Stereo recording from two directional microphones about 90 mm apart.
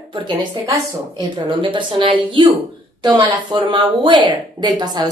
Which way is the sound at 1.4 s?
65° right (ahead or behind).